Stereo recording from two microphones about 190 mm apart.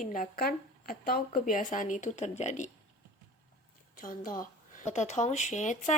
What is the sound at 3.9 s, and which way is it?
A woman's voice, 45° left (ahead or behind).